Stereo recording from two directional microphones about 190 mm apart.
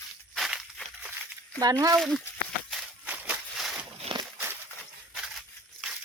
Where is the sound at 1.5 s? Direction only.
20° right (ahead or behind).